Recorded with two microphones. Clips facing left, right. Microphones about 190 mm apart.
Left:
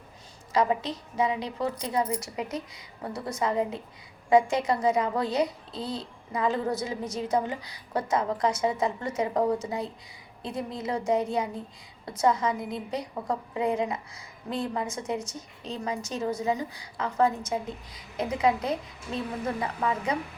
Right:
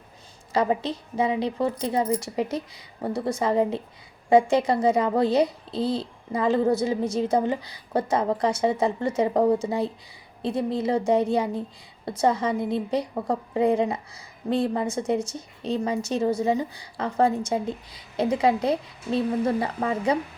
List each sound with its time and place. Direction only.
0.5 s a child's voice: 30° right (ahead or behind)